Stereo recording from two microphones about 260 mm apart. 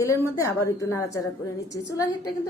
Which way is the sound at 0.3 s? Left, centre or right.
Centre.